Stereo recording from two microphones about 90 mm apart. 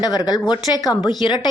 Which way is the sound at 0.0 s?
50° left (ahead or behind).